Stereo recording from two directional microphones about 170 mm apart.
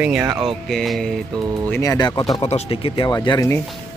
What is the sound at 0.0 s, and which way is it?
Speech, 10° right (ahead or behind).